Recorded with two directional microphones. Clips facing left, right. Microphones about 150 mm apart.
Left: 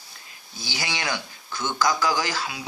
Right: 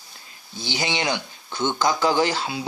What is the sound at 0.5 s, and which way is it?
Speech, 25° right (ahead or behind).